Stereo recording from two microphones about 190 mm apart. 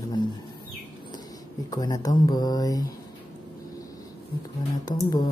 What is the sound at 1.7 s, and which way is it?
Speech, 20° left (ahead or behind).